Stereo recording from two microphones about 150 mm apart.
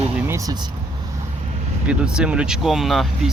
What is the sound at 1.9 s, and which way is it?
Speech, 5° right (ahead or behind).